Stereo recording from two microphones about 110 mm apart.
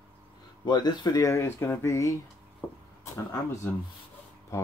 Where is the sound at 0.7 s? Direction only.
40° left (ahead or behind).